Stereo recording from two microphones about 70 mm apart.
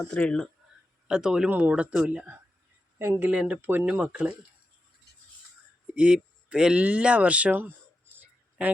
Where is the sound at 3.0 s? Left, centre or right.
Right.